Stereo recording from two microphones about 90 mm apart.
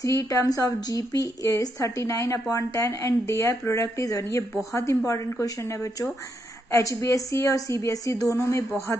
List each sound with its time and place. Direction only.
0.0 s speech: 40° left (ahead or behind)